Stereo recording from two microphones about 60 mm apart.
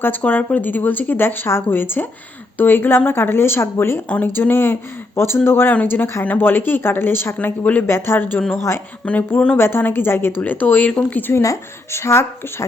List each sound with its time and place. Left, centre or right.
0.0 s speech: left
7.4 s speech: left
7.9 s speech: left
9.0 s speech: centre
9.6 s speech: left
11.4 s speech: left